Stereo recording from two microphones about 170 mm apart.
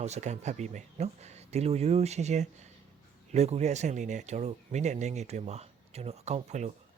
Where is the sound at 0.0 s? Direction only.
40° right (ahead or behind).